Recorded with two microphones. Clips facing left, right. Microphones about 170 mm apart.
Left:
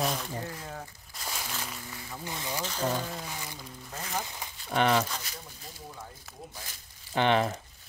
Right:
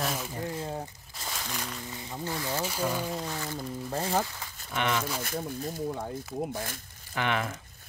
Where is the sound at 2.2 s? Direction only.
15° left (ahead or behind).